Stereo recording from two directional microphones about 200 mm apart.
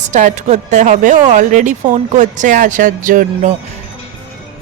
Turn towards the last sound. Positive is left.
turn(degrees=-40)  # may be behind; listen again after turning